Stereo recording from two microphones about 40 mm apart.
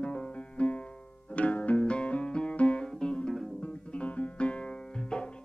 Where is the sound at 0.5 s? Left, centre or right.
Left.